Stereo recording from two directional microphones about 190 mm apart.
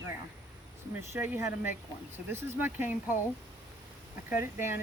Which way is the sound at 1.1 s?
15° right (ahead or behind).